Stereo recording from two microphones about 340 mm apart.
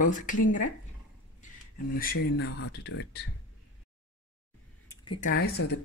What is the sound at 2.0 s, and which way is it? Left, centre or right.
Speech, left.